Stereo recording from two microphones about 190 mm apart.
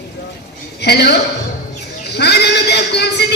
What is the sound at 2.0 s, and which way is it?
Sheep, 60° left (ahead or behind).